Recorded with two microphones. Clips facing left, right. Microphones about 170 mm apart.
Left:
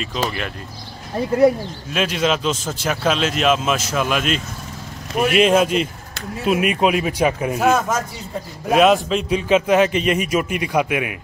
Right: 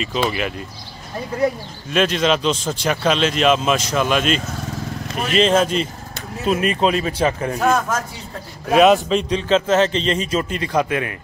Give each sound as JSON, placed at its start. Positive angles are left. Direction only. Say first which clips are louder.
{"t": 1.9, "sound": "a man's voice", "louder": "right 3 dB", "side_deg": 5}